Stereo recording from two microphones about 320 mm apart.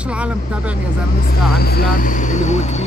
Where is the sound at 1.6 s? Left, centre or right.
Left.